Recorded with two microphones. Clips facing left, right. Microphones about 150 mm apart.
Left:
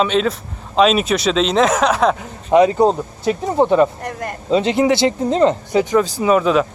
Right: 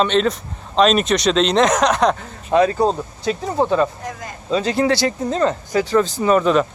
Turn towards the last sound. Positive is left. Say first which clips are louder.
# left 1 dB
turn(degrees=5)  # may be behind; listen again after turning